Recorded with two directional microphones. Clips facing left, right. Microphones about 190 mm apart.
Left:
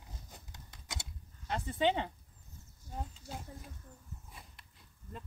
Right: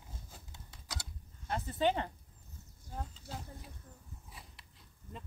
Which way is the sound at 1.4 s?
5° right (ahead or behind).